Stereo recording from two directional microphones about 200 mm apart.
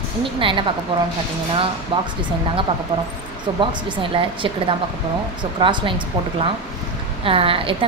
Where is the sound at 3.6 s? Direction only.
25° right (ahead or behind).